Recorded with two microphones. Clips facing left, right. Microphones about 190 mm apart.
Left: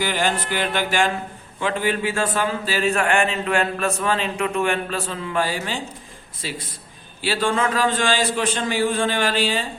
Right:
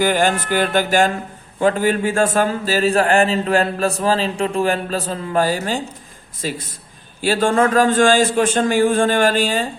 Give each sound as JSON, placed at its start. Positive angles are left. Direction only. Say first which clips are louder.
{"t": 0.0, "sound": "a man's voice", "louder": "right 6 dB", "side_deg": -45}